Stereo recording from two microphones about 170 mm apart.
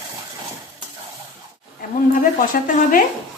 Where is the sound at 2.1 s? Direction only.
50° left (ahead or behind).